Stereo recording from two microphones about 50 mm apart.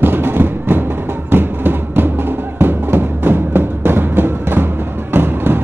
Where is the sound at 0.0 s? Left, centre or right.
Right.